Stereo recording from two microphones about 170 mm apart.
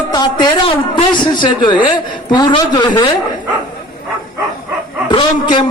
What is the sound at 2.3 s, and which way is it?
Speech, 25° left (ahead or behind).